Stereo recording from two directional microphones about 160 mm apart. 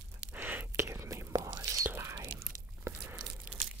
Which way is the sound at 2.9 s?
10° right (ahead or behind).